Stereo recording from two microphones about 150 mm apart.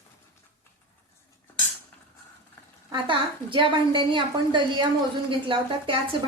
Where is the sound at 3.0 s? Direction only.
35° right (ahead or behind).